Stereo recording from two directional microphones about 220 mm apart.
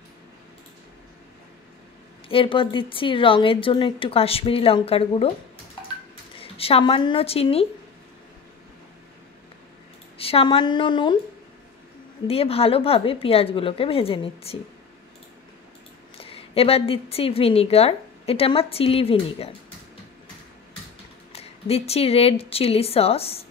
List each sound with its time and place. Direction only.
2.2 s a woman's voice: 25° left (ahead or behind)
6.3 s speech: 25° left (ahead or behind)
10.1 s a woman's voice: 25° left (ahead or behind)
12.3 s a woman's voice: 25° left (ahead or behind)
16.2 s a woman's voice: 25° left (ahead or behind)
21.3 s a woman's voice: 25° left (ahead or behind)